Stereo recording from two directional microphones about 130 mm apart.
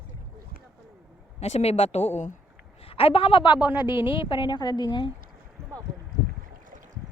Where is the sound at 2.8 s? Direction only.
45° left (ahead or behind).